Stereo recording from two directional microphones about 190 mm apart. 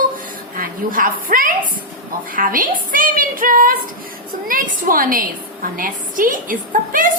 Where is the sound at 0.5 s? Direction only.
45° right (ahead or behind).